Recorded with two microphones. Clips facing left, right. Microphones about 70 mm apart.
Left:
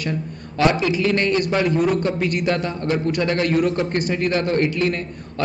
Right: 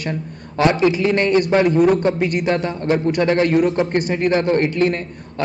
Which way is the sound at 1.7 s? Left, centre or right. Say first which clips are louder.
Right 5 dB; right.